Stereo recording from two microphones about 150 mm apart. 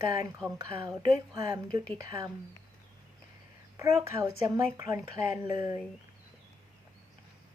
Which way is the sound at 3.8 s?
20° right (ahead or behind).